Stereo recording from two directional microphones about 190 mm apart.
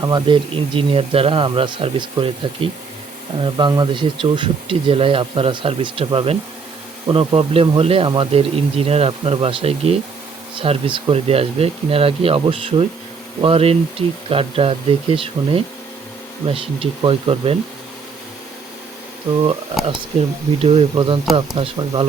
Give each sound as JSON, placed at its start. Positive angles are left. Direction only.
{"t": 0.0, "sound": "speech", "side_deg": -25}
{"t": 20.1, "sound": "speech", "side_deg": -35}